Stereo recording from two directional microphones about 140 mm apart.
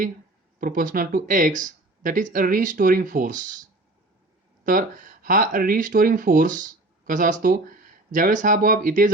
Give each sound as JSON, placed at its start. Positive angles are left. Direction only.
{"t": 0.6, "sound": "speech", "side_deg": -75}
{"t": 4.6, "sound": "speech", "side_deg": -70}